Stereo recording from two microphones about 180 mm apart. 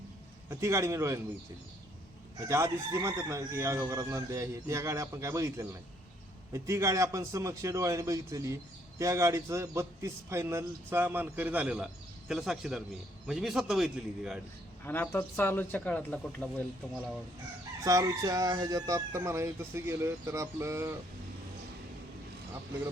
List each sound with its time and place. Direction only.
0.5 s speech: 15° right (ahead or behind)
2.5 s a man's voice: 15° right (ahead or behind)
14.8 s speech: 10° left (ahead or behind)
17.8 s speech: 20° right (ahead or behind)